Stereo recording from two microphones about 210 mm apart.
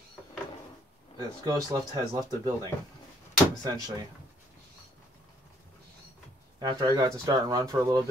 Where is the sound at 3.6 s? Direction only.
20° right (ahead or behind).